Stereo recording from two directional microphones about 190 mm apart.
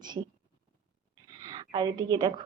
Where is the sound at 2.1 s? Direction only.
25° right (ahead or behind).